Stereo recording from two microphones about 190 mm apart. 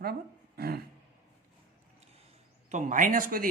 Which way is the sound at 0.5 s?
55° right (ahead or behind).